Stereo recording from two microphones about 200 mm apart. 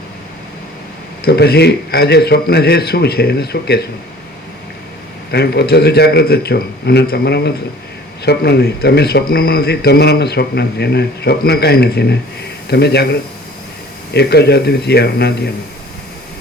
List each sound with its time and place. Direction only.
1.2 s speech: 50° left (ahead or behind)
5.3 s speech: 55° left (ahead or behind)
14.1 s speech: 55° left (ahead or behind)